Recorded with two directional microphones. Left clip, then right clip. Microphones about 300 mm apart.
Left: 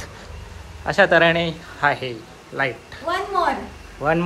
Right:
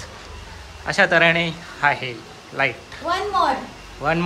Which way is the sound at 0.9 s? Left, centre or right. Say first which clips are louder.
Left 1 dB; centre.